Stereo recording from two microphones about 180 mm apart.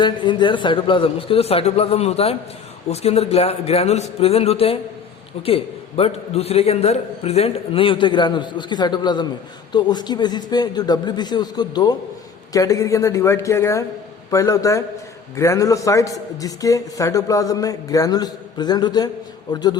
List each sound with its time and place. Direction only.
0.0 s a man's voice: 25° left (ahead or behind)